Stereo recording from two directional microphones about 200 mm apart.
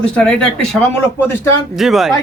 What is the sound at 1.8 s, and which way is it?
Speech, centre (ahead or behind).